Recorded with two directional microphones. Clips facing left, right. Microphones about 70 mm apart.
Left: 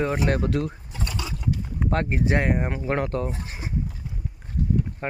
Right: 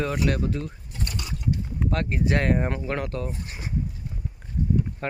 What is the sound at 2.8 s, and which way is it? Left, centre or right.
Speech, left.